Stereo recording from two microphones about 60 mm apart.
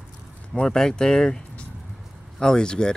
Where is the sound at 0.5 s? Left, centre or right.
Centre.